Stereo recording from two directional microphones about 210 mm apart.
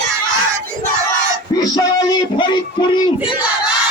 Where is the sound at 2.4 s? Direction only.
20° left (ahead or behind).